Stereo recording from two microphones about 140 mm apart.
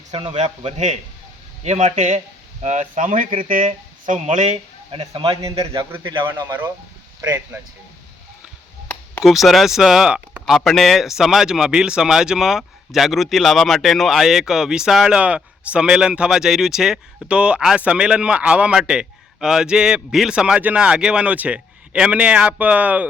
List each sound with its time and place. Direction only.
0.1 s speech: 40° right (ahead or behind)
0.3 s a man's voice: 50° right (ahead or behind)
4.9 s speech: 40° right (ahead or behind)
7.2 s speech: 15° right (ahead or behind)
8.9 s a sound: 10° left (ahead or behind)
9.2 s speech: centre (ahead or behind)